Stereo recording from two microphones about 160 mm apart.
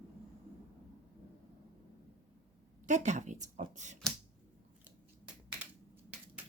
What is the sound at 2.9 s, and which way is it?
A woman's voice, 50° right (ahead or behind).